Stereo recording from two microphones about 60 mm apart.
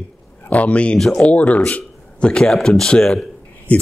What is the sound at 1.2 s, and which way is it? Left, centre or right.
A man's voice, left.